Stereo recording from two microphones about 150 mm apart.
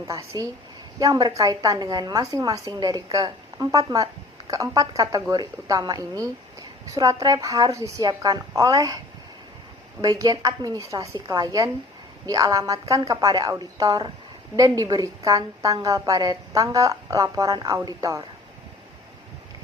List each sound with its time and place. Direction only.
0.9 s a woman's voice: 25° right (ahead or behind)
10.0 s a woman's voice: 25° right (ahead or behind)